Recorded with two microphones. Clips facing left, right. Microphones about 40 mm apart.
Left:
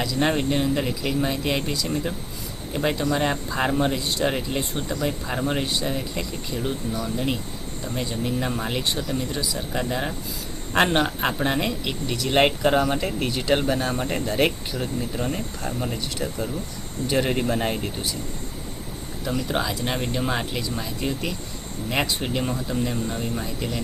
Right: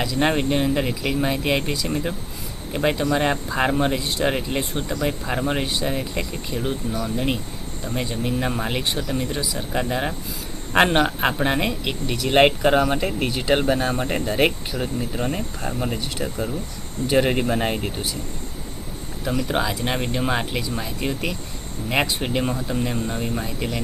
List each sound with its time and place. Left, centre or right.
0.0 s speech: right
19.2 s speech: right